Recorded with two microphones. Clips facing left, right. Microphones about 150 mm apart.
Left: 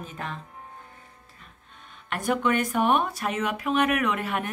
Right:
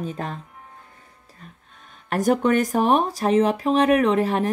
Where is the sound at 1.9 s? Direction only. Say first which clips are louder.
Right 7 dB; 40° right (ahead or behind).